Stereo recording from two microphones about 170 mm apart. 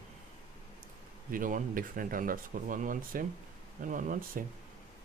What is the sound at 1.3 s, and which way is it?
Speech, 55° right (ahead or behind).